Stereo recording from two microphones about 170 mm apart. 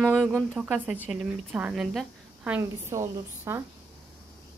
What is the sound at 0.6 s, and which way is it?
A woman's voice, 10° right (ahead or behind).